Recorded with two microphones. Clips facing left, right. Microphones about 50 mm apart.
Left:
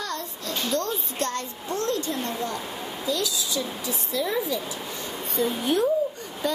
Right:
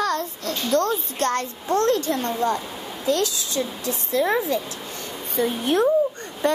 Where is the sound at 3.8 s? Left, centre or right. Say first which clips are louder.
Right 8 dB; right.